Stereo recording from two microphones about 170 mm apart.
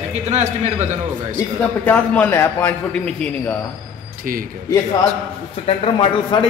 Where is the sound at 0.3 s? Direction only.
40° right (ahead or behind).